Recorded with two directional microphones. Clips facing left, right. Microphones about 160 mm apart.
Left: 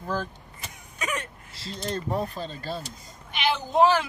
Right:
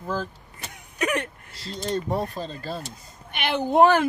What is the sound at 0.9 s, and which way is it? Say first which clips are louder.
Speech: right 7 dB; 65° right (ahead or behind).